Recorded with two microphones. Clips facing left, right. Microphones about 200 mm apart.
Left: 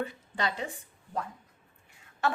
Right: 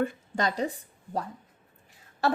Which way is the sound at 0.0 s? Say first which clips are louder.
Right 5 dB; 45° right (ahead or behind).